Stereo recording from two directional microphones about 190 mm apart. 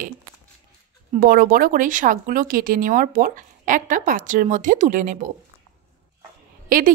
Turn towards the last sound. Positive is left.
turn(degrees=-45)  # may be behind; listen again after turning